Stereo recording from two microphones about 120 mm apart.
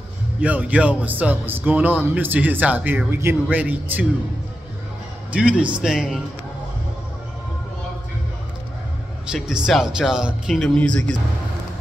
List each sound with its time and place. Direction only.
0.4 s speech: 10° right (ahead or behind)
5.3 s speech: 10° right (ahead or behind)
9.3 s a man's voice: 5° right (ahead or behind)